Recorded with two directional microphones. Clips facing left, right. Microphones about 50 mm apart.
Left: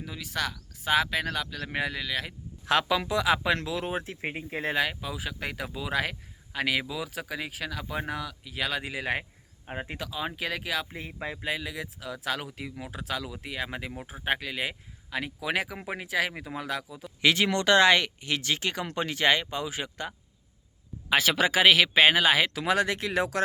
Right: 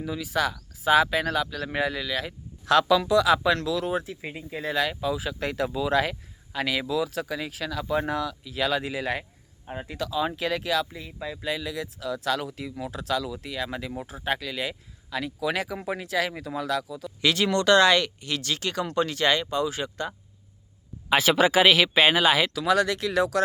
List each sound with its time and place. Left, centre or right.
0.0 s speech: centre
2.6 s speech: centre
4.0 s speech: left
4.7 s speech: centre
5.1 s speech: centre
9.6 s speech: left
10.0 s speech: centre
10.8 s speech: left
11.4 s speech: centre
21.1 s speech: centre
22.5 s speech: left